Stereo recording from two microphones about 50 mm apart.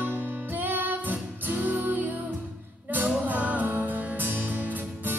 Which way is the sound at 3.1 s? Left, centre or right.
Right.